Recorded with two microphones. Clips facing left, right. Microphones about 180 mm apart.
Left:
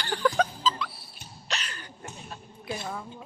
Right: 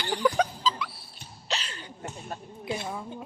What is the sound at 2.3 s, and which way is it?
Speech, 50° right (ahead or behind).